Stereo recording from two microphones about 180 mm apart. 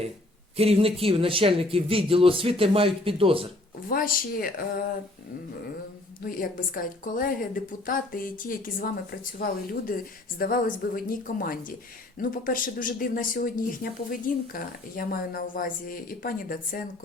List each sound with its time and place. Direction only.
0.5 s speech: 35° right (ahead or behind)
3.8 s speech: 50° left (ahead or behind)
6.2 s speech: 50° left (ahead or behind)